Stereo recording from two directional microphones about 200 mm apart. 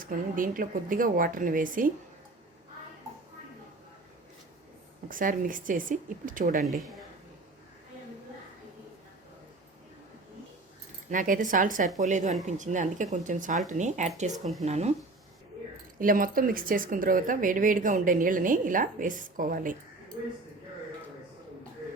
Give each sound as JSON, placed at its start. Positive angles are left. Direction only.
{"t": 0.0, "sound": "speech", "side_deg": -45}
{"t": 5.0, "sound": "speech", "side_deg": -40}
{"t": 11.1, "sound": "speech", "side_deg": -40}
{"t": 16.0, "sound": "speech", "side_deg": -45}